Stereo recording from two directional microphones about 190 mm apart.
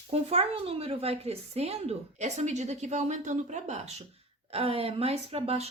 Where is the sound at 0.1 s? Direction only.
30° right (ahead or behind).